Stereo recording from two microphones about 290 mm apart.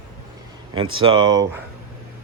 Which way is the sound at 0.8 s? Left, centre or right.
Right.